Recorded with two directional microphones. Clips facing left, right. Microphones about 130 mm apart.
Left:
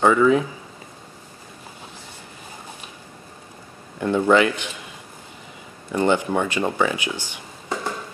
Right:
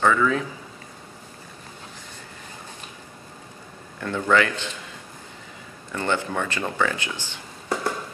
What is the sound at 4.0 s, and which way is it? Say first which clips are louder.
Speech: left 4 dB; 20° left (ahead or behind).